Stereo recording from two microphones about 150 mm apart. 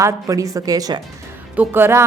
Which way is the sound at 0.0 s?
20° right (ahead or behind).